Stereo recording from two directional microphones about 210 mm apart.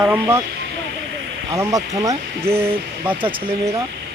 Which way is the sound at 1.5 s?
15° right (ahead or behind).